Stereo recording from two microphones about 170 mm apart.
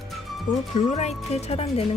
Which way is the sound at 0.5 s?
50° left (ahead or behind).